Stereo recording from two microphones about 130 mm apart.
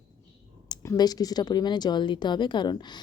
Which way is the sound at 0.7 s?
25° left (ahead or behind).